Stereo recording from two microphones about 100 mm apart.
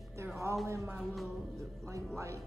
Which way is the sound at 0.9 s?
Centre (ahead or behind).